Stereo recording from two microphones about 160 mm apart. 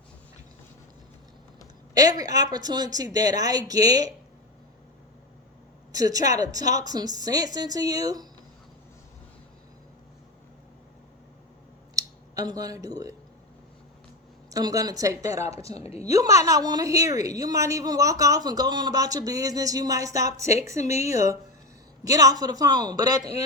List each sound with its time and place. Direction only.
2.0 s a woman's voice: 25° right (ahead or behind)
5.9 s a woman's voice: 25° right (ahead or behind)
11.9 s speech: 20° right (ahead or behind)
14.5 s a woman's voice: 20° right (ahead or behind)
15.8 s a woman's voice: 40° left (ahead or behind)
16.0 s a woman's voice: 20° right (ahead or behind)